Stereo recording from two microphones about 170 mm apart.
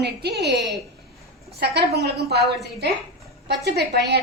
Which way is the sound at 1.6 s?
80° right.